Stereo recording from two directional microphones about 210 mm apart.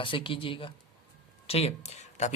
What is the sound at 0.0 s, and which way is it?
Speech, 25° left (ahead or behind).